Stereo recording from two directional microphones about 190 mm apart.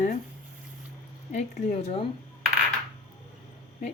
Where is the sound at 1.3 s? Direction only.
35° left (ahead or behind).